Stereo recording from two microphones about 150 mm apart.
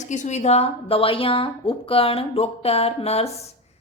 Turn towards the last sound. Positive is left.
turn(degrees=45)  # may be behind; listen again after turning